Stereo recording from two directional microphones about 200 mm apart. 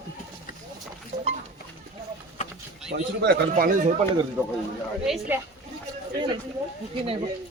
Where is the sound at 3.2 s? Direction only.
50° right (ahead or behind).